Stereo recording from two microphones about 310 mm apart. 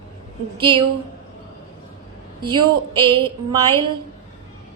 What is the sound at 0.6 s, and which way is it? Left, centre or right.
Speech, centre.